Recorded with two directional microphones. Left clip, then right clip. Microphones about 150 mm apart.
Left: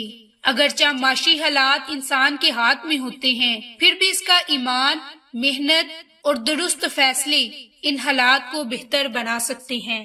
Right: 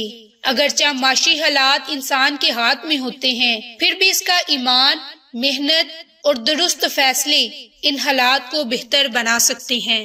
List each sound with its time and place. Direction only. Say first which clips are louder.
0.0 s a woman's voice: right 1 dB; 25° right (ahead or behind)